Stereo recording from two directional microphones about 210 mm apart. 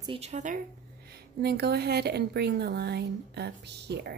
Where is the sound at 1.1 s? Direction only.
50° right (ahead or behind).